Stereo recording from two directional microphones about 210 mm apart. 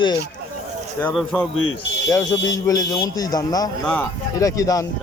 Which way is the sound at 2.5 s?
15° left (ahead or behind).